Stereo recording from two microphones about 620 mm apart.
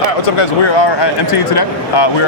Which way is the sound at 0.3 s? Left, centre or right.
Left.